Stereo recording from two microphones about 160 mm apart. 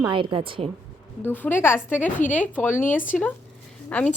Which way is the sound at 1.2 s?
15° left (ahead or behind).